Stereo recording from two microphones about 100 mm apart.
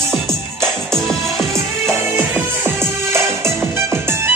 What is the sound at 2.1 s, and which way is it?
Music, 20° right (ahead or behind).